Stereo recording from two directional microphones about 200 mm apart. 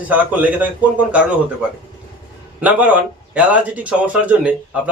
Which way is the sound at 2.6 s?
5° right (ahead or behind).